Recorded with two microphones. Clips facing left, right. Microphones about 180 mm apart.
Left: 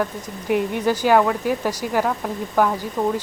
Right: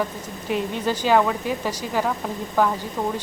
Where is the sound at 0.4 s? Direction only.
15° left (ahead or behind).